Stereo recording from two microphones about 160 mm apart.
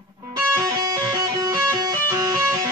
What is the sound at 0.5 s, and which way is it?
Music, 20° right (ahead or behind).